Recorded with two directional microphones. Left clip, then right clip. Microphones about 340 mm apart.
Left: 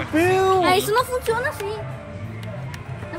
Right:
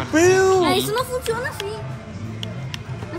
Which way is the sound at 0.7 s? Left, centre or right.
Centre.